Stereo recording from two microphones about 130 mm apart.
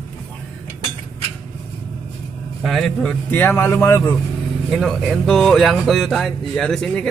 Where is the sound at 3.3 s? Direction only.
15° left (ahead or behind).